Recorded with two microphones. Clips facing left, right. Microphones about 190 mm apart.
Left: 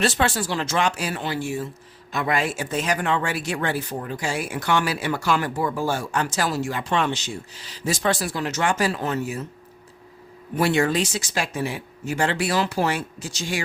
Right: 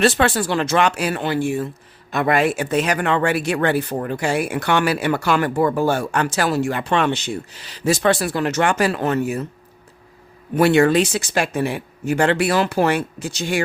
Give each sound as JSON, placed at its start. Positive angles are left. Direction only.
{"t": 0.0, "sound": "speech", "side_deg": -60}
{"t": 10.5, "sound": "speech", "side_deg": -65}